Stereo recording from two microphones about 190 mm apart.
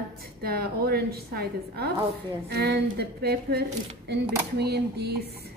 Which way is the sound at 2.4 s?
55° right (ahead or behind).